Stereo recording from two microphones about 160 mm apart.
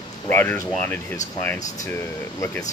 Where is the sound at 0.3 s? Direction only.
10° left (ahead or behind).